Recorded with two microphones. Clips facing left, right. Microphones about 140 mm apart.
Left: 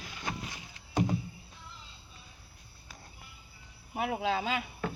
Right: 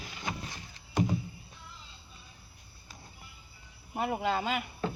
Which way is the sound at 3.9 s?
Centre (ahead or behind).